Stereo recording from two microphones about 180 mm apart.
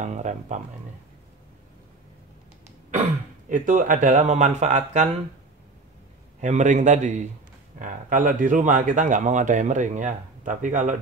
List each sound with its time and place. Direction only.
0.0 s speech: 40° right (ahead or behind)
2.9 s speech: 45° right (ahead or behind)
6.4 s speech: 40° right (ahead or behind)